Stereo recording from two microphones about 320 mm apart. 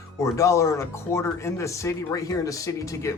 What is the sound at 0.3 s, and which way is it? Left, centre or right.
Speech, centre.